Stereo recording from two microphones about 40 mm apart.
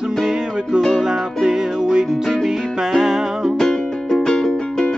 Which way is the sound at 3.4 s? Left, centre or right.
Centre.